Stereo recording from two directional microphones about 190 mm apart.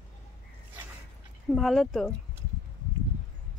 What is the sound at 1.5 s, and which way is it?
Speech, centre (ahead or behind).